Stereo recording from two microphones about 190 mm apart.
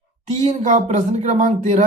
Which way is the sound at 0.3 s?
40° right (ahead or behind).